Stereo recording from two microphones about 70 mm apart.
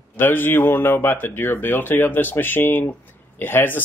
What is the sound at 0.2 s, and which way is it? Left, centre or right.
Speech, left.